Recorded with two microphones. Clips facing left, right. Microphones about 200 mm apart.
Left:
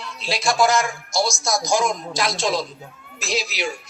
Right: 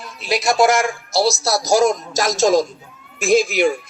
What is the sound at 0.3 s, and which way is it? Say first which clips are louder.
Speech: right 4 dB; 20° right (ahead or behind).